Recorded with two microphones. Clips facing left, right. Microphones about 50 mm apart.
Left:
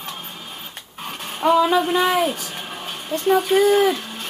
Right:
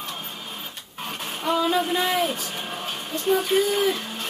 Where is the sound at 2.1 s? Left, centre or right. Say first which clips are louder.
Left 3 dB; centre.